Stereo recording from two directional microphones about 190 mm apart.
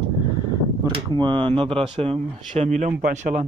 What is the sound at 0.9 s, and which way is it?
Speech, 25° right (ahead or behind).